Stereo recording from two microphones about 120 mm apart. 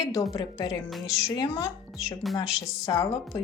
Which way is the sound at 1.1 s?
30° left (ahead or behind).